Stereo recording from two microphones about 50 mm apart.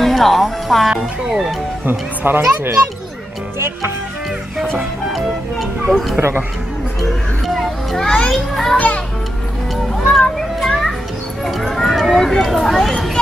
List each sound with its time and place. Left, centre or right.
0.0 s speech: centre
0.8 s speech: centre
1.9 s speech: right
3.5 s speech: right
5.1 s speech: centre
7.0 s children playing: centre
8.3 s speech: centre
8.7 s a child's voice: left
9.9 s music: centre
10.6 s children playing: centre
11.4 s speech: centre